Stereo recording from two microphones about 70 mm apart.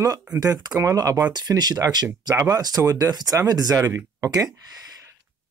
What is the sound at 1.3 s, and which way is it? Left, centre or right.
Speech, right.